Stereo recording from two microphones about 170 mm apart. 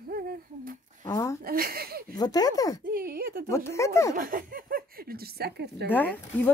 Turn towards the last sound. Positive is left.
turn(degrees=10)  # may be behind; listen again after turning